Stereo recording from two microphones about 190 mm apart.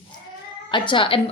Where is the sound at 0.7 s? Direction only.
25° left (ahead or behind).